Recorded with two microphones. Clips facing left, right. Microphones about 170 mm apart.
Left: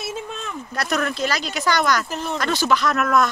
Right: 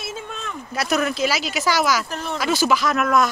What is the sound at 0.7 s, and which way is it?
Speech, 5° right (ahead or behind).